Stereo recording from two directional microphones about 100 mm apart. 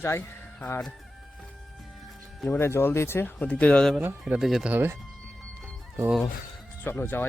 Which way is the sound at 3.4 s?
10° left (ahead or behind).